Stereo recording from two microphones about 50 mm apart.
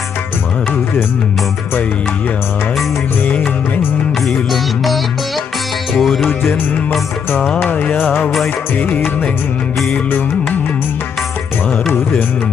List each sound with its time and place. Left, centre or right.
5.9 s music: centre
7.6 s music: left